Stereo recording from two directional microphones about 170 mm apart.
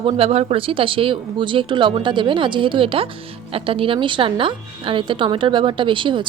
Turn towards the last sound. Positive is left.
turn(degrees=-30)  # may be behind; listen again after turning